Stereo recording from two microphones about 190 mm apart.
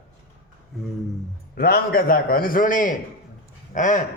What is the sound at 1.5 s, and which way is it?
A man's voice, 50° left (ahead or behind).